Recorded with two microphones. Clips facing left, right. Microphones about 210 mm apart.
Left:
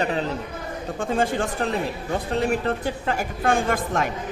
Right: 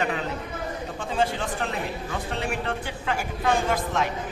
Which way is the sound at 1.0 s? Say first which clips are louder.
Left 4 dB; 45° left (ahead or behind).